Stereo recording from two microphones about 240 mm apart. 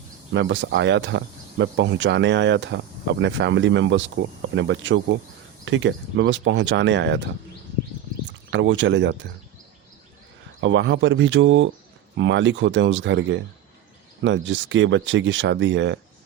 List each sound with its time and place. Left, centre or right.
0.3 s speech: right
8.4 s speech: right
10.6 s speech: right